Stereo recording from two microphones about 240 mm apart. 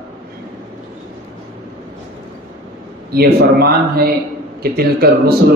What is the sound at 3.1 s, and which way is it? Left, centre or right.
A man's voice, right.